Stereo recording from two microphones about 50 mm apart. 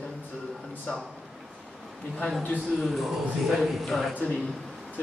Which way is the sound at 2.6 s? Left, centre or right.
Centre.